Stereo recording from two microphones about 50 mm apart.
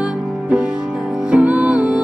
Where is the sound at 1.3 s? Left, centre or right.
Right.